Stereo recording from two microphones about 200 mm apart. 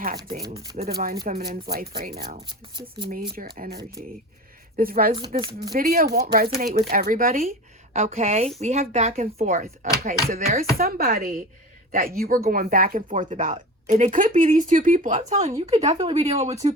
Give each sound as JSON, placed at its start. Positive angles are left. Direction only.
{"t": 0.4, "sound": "speech", "side_deg": -20}
{"t": 0.9, "sound": "speech", "side_deg": -50}
{"t": 2.5, "sound": "speech", "side_deg": -25}
{"t": 3.3, "sound": "speech", "side_deg": -45}
{"t": 5.4, "sound": "speech", "side_deg": -25}
{"t": 5.7, "sound": "speech", "side_deg": -45}
{"t": 7.9, "sound": "speech", "side_deg": -35}